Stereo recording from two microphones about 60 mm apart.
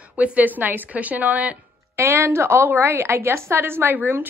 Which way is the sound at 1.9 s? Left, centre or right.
Right.